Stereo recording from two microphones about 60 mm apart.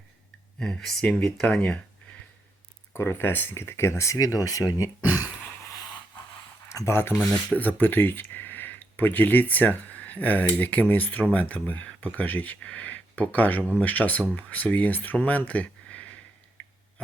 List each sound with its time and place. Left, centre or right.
0.6 s speech: centre
2.9 s speech: left
6.8 s speech: left
7.5 s speech: left